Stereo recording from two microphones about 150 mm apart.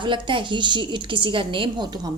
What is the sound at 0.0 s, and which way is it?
A woman's voice, 35° right (ahead or behind).